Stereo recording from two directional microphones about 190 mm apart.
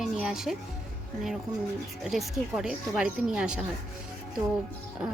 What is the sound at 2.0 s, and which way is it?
A woman's voice, centre (ahead or behind).